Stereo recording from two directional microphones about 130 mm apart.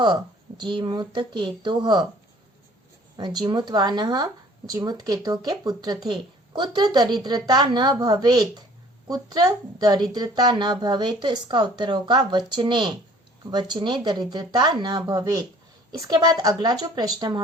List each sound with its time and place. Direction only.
0.0 s a woman's voice: 35° right (ahead or behind)
3.2 s a woman's voice: 35° right (ahead or behind)